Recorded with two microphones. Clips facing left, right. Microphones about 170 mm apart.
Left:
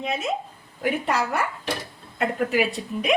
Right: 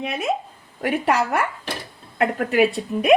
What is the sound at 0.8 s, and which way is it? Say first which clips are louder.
Speech: right 3 dB; 65° right (ahead or behind).